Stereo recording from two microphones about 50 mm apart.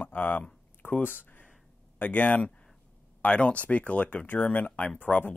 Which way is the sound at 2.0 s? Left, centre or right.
Left.